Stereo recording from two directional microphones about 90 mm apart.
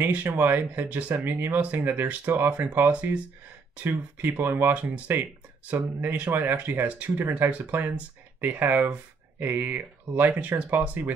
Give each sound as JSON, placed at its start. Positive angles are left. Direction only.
{"t": 0.0, "sound": "speech", "side_deg": -20}